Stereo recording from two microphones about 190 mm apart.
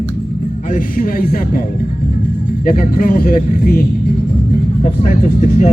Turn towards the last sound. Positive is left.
turn(degrees=45)  # may be behind; listen again after turning